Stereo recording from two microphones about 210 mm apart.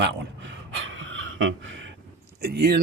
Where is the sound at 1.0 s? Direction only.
65° right (ahead or behind).